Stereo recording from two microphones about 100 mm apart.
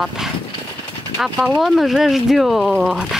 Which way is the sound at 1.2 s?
5° right (ahead or behind).